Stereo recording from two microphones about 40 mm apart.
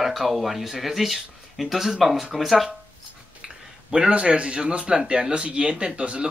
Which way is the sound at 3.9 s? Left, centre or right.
Right.